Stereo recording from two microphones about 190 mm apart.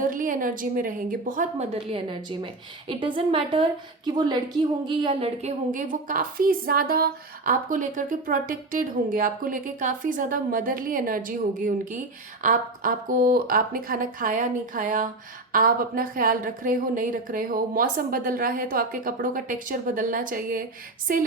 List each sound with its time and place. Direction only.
0.0 s a woman's voice: 45° right (ahead or behind)
1.7 s a woman's voice: 30° right (ahead or behind); by 21.2 s 45° right (ahead or behind)